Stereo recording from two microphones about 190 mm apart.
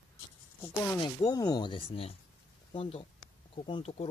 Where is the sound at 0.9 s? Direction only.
20° left (ahead or behind).